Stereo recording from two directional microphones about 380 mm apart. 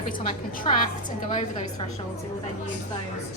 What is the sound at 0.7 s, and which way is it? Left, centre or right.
Speech, centre.